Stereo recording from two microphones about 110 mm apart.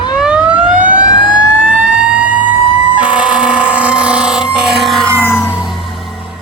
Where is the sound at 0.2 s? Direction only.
10° right (ahead or behind).